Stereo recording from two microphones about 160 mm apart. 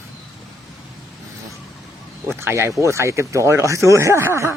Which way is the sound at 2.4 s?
15° right (ahead or behind).